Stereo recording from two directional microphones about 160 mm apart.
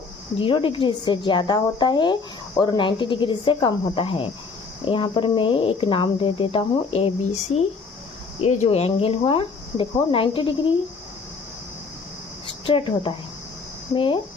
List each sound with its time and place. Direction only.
0.3 s a woman's voice: 30° left (ahead or behind)
8.4 s speech: 40° left (ahead or behind)
12.6 s speech: 30° left (ahead or behind)